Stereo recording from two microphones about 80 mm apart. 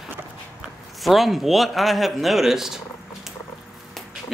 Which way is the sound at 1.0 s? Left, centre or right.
Centre.